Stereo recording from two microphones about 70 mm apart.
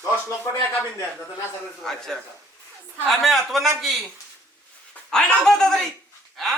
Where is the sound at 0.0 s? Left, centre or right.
Left.